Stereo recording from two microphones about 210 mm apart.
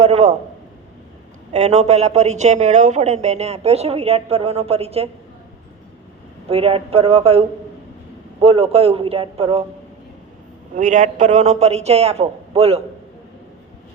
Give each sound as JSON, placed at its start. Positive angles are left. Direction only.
{"t": 0.0, "sound": "a sound", "side_deg": -30}
{"t": 1.5, "sound": "speech", "side_deg": -30}
{"t": 6.5, "sound": "a man's voice", "side_deg": -25}
{"t": 10.8, "sound": "speech", "side_deg": -35}